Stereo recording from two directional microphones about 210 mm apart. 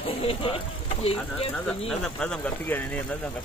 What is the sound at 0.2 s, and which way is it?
Speech, 25° left (ahead or behind).